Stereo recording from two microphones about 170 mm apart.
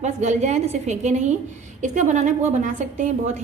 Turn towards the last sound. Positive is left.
turn(degrees=-50)  # may be behind; listen again after turning